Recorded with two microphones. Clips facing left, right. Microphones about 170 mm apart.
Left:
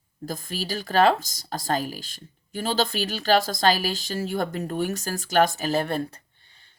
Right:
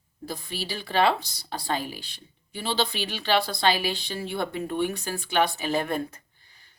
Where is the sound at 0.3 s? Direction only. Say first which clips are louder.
Left 3 dB; 45° left (ahead or behind).